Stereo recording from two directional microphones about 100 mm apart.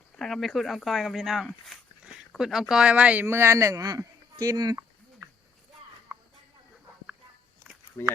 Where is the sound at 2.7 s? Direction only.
10° right (ahead or behind).